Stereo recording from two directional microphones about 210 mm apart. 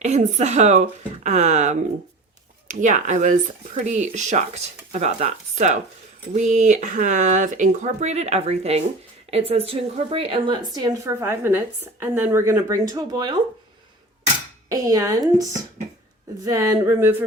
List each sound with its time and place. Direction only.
0.0 s a woman's voice: 35° right (ahead or behind)
14.7 s a woman's voice: 15° right (ahead or behind)
16.4 s a woman's voice: 15° right (ahead or behind)